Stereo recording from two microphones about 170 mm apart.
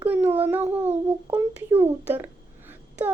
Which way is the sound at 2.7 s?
10° right (ahead or behind).